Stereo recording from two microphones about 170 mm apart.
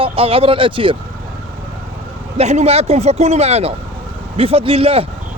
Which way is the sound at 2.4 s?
40° right (ahead or behind).